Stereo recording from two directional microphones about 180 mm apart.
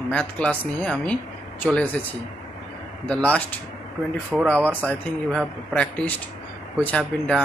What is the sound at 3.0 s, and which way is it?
A man's voice, 5° left (ahead or behind).